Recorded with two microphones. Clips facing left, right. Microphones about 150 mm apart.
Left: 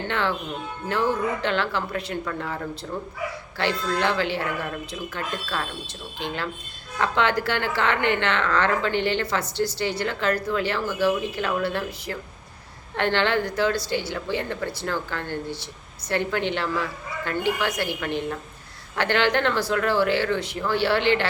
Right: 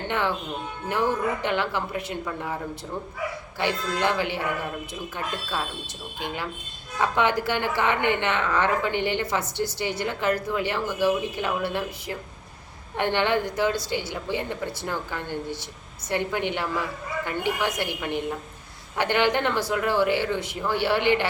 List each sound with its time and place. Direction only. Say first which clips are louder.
0.1 s a woman's voice: right 1 dB; 15° right (ahead or behind)
3.6 s a woman's voice: left 1 dB; 15° right (ahead or behind)
7.0 s a woman's voice: even; 15° right (ahead or behind)